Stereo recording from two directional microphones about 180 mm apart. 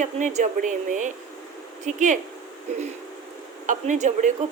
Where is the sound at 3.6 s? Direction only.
45° right (ahead or behind).